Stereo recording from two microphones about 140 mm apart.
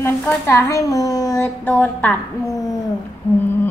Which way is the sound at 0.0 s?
20° left (ahead or behind).